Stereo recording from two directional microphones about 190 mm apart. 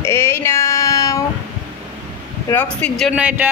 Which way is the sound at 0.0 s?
15° left (ahead or behind).